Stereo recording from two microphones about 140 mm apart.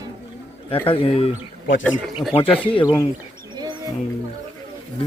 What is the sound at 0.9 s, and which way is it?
Speech, 45° left (ahead or behind).